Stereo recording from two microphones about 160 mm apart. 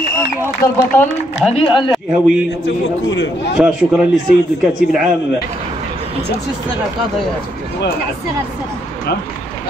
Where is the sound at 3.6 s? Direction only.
5° right (ahead or behind).